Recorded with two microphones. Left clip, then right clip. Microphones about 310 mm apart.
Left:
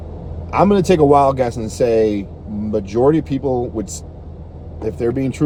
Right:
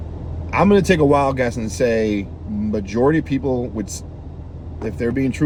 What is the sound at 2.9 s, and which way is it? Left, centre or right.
Speech, left.